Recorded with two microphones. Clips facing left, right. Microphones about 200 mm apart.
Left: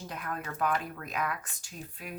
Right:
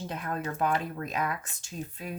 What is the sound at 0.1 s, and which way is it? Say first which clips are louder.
Speech: right 3 dB; 25° right (ahead or behind).